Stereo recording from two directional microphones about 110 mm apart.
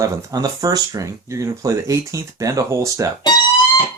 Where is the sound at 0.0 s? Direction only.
25° right (ahead or behind).